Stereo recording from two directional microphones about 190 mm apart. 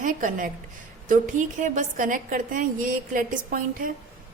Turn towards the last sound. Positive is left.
turn(degrees=-45)  # may be behind; listen again after turning